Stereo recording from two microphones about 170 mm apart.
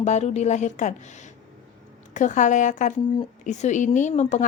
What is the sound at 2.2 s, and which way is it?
A woman's voice, 45° left (ahead or behind).